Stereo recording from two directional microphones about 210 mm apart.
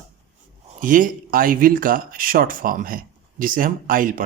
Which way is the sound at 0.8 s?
40° right (ahead or behind).